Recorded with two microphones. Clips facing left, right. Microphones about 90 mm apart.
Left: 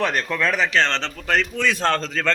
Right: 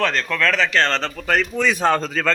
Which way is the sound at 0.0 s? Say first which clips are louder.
Right 1 dB; 15° left (ahead or behind).